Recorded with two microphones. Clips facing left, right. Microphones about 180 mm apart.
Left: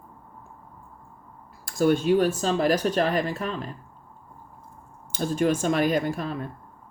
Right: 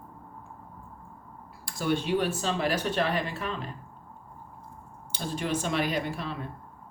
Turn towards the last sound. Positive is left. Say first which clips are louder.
# left 6 dB
turn(degrees=45)  # may be behind; listen again after turning